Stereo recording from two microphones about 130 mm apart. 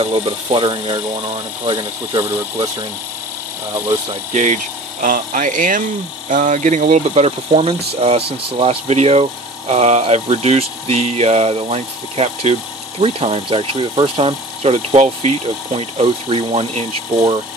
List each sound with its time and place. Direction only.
0.0 s speech: 50° right (ahead or behind)
4.3 s speech: 65° right (ahead or behind)
5.0 s speech: 85° right; by 16.8 s 50° right (ahead or behind)